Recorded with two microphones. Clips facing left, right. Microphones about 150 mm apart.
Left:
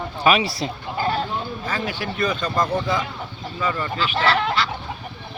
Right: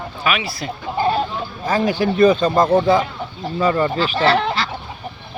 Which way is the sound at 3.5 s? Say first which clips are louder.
Right 7 dB; 40° right (ahead or behind).